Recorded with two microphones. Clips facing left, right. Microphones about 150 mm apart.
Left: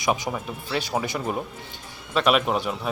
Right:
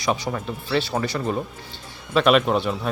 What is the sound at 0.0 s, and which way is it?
Speech, 10° left (ahead or behind).